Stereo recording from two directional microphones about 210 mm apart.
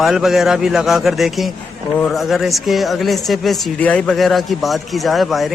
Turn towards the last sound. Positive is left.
turn(degrees=0)  # may be behind; listen again after turning